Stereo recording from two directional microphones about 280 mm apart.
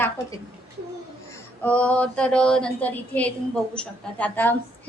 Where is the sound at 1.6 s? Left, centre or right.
Centre.